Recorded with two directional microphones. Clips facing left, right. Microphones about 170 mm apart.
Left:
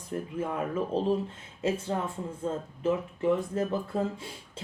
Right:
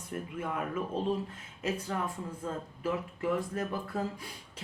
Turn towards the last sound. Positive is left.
turn(degrees=25)  # may be behind; listen again after turning